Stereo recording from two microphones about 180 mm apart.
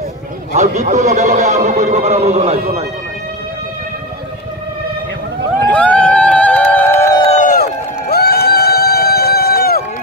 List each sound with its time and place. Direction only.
0.5 s a man's voice: 40° right (ahead or behind)
5.7 s crowd: 5° left (ahead or behind)
7.2 s run: 35° left (ahead or behind)
7.4 s run: 55° left (ahead or behind)